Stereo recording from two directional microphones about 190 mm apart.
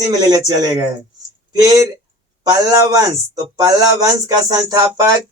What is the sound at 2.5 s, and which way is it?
A man's voice, 20° right (ahead or behind).